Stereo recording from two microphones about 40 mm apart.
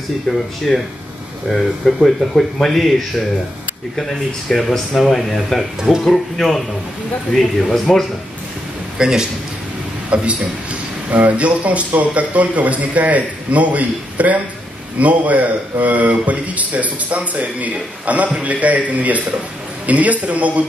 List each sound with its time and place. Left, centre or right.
0.3 s speech: centre
0.7 s speech: centre
7.9 s speech: centre
8.9 s a man's voice: centre
10.0 s a man's voice: right